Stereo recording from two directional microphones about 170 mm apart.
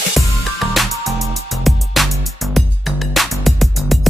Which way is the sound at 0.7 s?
Centre (ahead or behind).